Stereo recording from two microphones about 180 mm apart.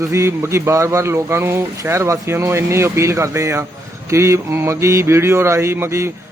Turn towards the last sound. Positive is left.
turn(degrees=-15)  # may be behind; listen again after turning